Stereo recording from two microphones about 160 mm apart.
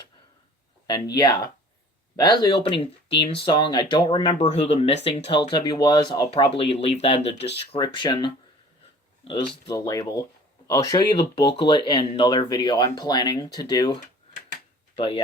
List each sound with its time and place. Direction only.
0.9 s speech: 25° left (ahead or behind)
4.4 s speech: 40° left (ahead or behind)
5.5 s speech: 25° left (ahead or behind)
6.3 s speech: 40° left (ahead or behind)
14.9 s speech: 35° left (ahead or behind)